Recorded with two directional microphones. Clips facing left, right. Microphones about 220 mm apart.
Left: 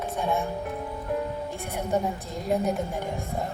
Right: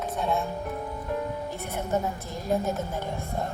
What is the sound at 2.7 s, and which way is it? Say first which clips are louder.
Speech: left 2 dB; 15° left (ahead or behind).